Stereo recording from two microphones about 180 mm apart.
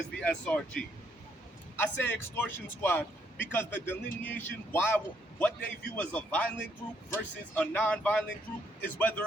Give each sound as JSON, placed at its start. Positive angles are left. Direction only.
{"t": 0.2, "sound": "a man's voice", "side_deg": 5}